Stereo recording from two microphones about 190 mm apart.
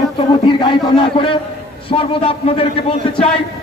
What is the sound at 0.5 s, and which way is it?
A man's voice, 25° left (ahead or behind).